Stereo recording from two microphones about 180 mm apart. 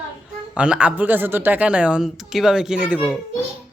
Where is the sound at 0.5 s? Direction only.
5° right (ahead or behind).